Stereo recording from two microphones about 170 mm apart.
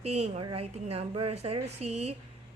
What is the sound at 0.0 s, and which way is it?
A woman's voice, 40° right (ahead or behind).